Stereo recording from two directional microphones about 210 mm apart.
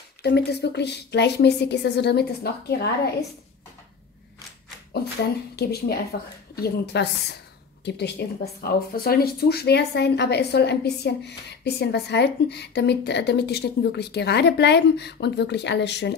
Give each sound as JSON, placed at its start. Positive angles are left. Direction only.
{"t": 0.2, "sound": "a woman's voice", "side_deg": 50}
{"t": 4.9, "sound": "a woman's voice", "side_deg": 50}